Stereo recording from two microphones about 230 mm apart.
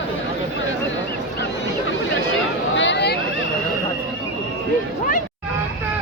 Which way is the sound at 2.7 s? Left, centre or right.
Left.